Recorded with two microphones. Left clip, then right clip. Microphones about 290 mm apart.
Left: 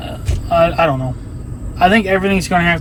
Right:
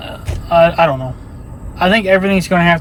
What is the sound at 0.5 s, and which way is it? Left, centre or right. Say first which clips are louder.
A man's voice: right 3 dB; centre.